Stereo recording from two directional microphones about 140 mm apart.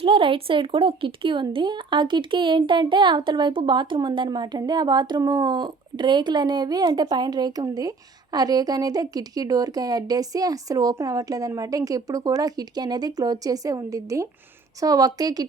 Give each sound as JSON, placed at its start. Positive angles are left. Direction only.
{"t": 0.0, "sound": "speech", "side_deg": -40}